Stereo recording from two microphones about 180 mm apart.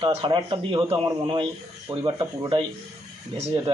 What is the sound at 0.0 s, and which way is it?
A man's voice, 25° right (ahead or behind).